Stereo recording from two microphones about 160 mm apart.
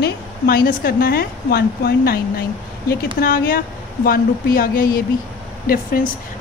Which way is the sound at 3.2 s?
65° left (ahead or behind).